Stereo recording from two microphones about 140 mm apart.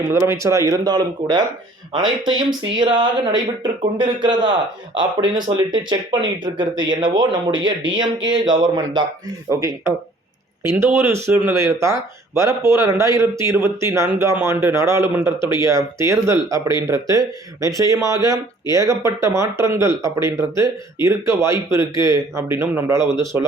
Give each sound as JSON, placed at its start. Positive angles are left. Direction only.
{"t": 0.1, "sound": "speech", "side_deg": -20}